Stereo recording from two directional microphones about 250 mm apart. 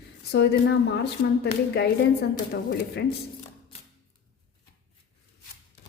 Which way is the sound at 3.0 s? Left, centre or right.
Left.